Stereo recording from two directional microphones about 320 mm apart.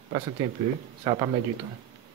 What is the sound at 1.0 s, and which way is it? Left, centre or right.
Speech, centre.